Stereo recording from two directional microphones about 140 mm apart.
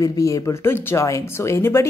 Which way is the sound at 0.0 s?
25° left (ahead or behind).